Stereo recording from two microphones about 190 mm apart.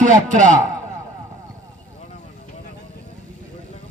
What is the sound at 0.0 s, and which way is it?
Speech, 40° right (ahead or behind).